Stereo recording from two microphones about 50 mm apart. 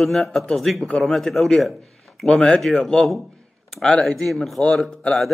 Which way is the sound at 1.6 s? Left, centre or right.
Centre.